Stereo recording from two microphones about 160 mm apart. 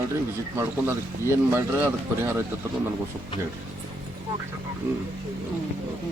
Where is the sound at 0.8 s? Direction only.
15° right (ahead or behind).